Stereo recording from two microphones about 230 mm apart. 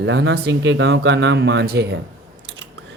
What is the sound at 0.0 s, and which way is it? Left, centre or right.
Speech, right.